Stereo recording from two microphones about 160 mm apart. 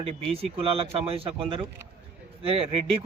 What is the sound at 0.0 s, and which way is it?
A man's voice, 35° right (ahead or behind).